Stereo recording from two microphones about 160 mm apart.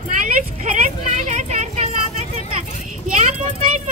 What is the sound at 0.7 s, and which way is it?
Vehicle, 50° right (ahead or behind).